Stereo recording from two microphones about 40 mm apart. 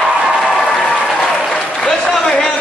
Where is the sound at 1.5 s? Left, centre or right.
Centre.